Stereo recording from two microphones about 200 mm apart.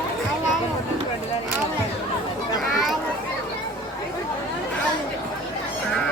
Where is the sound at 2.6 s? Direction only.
Centre (ahead or behind).